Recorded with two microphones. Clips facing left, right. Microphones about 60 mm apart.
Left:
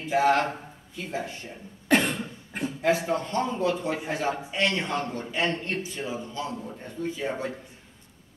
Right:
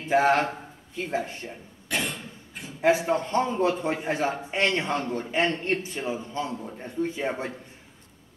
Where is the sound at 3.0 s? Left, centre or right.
Right.